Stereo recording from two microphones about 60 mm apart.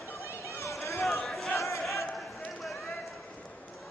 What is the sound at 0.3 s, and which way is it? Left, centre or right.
Run, left.